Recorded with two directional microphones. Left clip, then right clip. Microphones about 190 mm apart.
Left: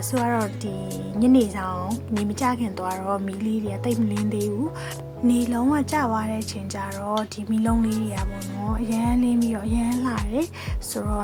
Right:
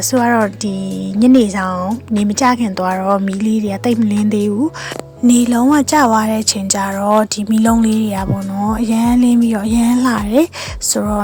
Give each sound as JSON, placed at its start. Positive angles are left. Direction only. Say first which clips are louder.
{"t": 0.1, "sound": "a woman's voice", "louder": "right 10 dB", "side_deg": -40}
{"t": 5.3, "sound": "a woman's voice", "louder": "right 10 dB", "side_deg": -45}